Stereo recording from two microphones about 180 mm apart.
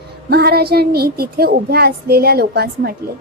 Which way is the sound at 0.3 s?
60° right (ahead or behind).